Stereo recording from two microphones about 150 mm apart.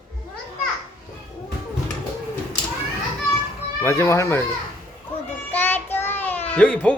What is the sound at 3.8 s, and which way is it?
Speech, 20° left (ahead or behind).